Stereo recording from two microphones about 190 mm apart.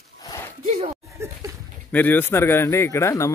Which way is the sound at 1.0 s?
15° right (ahead or behind).